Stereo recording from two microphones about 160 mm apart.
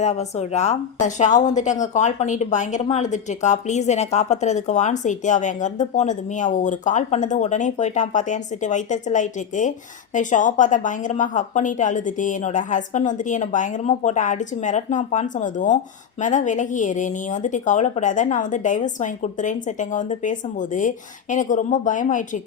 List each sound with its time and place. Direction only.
0.0 s speech: 45° left (ahead or behind)